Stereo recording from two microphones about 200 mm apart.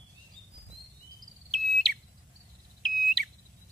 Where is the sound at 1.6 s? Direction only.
Centre (ahead or behind).